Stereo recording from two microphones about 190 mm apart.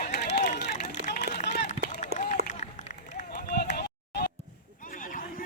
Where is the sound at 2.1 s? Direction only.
55° right (ahead or behind).